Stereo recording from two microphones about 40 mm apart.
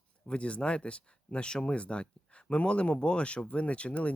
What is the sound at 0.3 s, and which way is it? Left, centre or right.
Speech, left.